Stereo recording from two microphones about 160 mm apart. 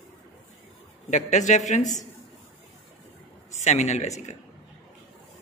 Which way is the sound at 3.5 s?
45° left (ahead or behind).